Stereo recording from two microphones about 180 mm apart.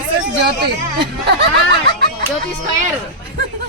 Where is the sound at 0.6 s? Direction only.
65° right (ahead or behind).